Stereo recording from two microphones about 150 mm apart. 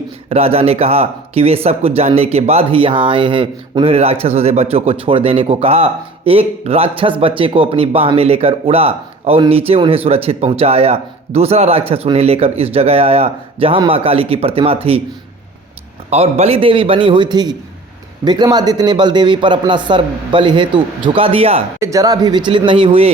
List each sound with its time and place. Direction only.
0.3 s speech: 40° right (ahead or behind)
16.0 s speech: 45° right (ahead or behind)
21.8 s speech: 20° right (ahead or behind); by 23.1 s 40° right (ahead or behind)